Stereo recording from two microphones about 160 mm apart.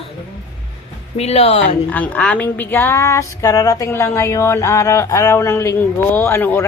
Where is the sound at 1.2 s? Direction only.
40° left (ahead or behind).